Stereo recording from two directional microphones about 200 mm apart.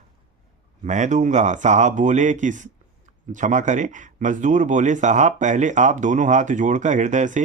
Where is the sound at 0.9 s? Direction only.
35° right (ahead or behind).